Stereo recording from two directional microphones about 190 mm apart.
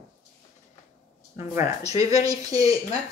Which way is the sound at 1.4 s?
15° right (ahead or behind).